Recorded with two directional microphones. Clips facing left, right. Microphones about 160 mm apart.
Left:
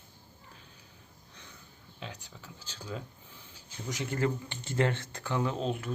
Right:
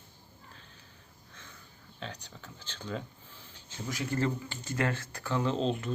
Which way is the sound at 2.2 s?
10° left (ahead or behind).